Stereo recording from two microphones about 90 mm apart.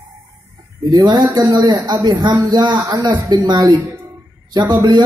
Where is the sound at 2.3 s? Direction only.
40° right (ahead or behind).